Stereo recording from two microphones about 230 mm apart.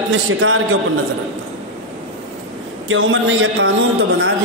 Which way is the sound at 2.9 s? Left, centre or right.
Right.